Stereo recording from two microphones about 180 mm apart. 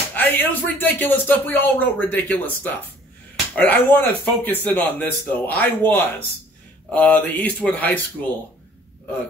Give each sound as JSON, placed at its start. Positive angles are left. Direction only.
{"t": 0.1, "sound": "speech", "side_deg": 10}